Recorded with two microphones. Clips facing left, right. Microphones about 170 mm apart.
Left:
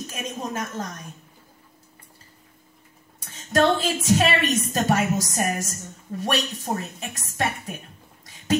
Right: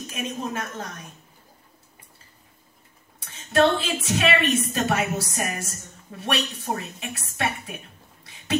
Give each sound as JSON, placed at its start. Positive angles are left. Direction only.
{"t": 0.0, "sound": "a woman's voice", "side_deg": 40}
{"t": 3.2, "sound": "a woman's voice", "side_deg": 40}